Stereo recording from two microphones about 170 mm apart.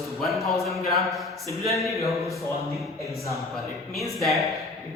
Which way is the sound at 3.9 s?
Centre (ahead or behind).